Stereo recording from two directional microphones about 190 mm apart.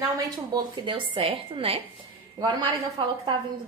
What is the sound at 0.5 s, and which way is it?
A woman's voice, 25° right (ahead or behind).